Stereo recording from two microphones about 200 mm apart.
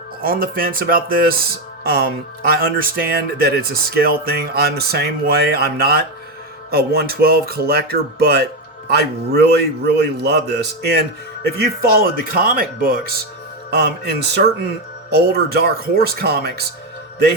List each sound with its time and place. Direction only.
0.2 s speech: 45° right (ahead or behind)
1.8 s music: 50° right (ahead or behind)
2.6 s a man's voice: 45° right (ahead or behind)